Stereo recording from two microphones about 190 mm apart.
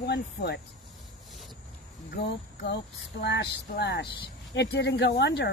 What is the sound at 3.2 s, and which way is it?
Speech, 60° left (ahead or behind).